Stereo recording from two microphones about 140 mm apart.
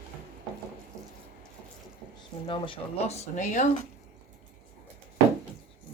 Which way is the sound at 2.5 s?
40° left (ahead or behind).